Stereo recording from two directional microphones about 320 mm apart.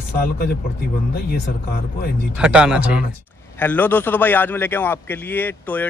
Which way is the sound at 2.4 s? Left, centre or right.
Centre.